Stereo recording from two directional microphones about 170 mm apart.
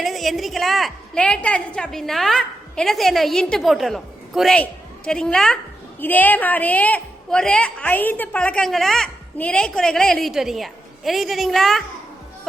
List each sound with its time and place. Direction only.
0.0 s a woman's voice: centre (ahead or behind)